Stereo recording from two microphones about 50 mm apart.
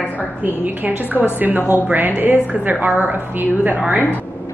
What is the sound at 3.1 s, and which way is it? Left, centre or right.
Speech, right.